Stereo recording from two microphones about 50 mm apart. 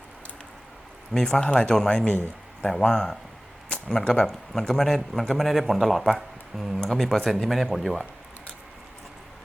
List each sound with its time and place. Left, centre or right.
1.1 s a man's voice: centre